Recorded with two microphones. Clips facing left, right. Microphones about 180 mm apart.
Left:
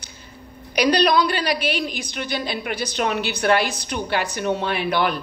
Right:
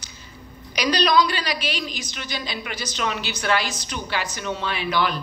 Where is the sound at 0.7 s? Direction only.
55° left (ahead or behind).